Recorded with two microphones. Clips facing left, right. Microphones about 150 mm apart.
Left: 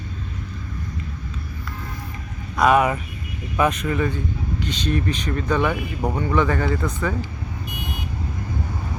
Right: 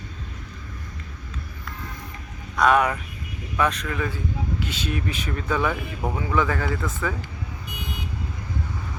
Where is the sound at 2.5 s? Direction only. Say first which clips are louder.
Left 2 dB; 5° left (ahead or behind).